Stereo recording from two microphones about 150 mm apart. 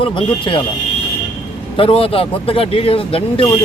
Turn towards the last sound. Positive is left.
turn(degrees=40)  # may be behind; listen again after turning